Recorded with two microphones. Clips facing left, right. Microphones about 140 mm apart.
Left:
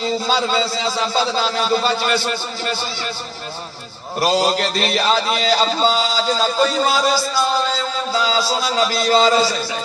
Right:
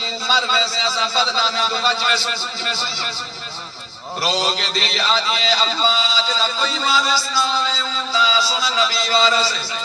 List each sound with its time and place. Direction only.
0.0 s a man's voice: 50° left (ahead or behind)
4.2 s a man's voice: 50° left (ahead or behind)